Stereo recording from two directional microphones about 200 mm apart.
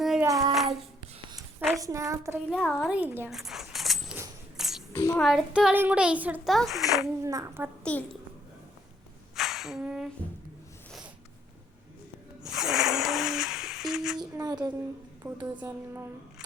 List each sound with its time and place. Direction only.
0.0 s child singing: centre (ahead or behind)
0.3 s child singing: 15° right (ahead or behind)
0.5 s child singing: centre (ahead or behind)
1.4 s a sound: centre (ahead or behind)
1.8 s speech: 15° right (ahead or behind)
2.5 s speech: 5° left (ahead or behind)
4.5 s a sound: centre (ahead or behind)
4.9 s a child's voice: 15° left (ahead or behind)
5.2 s a child's voice: centre (ahead or behind)
7.0 s speech: 15° right (ahead or behind)
9.3 s a sound: centre (ahead or behind)
12.5 s a sound: centre (ahead or behind)
14.2 s speech: 20° right (ahead or behind)